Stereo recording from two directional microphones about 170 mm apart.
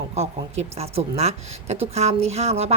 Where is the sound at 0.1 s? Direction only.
40° right (ahead or behind).